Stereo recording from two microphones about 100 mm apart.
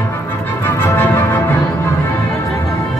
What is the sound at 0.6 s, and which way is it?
Music, 25° left (ahead or behind).